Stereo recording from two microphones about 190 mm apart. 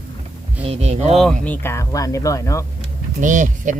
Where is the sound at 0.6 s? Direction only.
35° right (ahead or behind).